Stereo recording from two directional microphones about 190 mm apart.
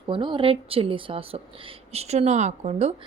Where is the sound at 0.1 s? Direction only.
25° right (ahead or behind).